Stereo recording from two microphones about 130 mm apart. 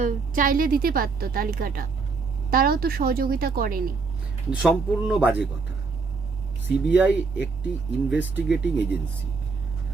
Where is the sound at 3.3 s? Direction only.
90° right.